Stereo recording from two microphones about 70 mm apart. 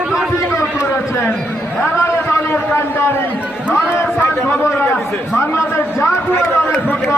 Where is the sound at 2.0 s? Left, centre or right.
Left.